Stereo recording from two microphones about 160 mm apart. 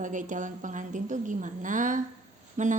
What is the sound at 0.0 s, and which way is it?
A woman's voice, 55° right (ahead or behind).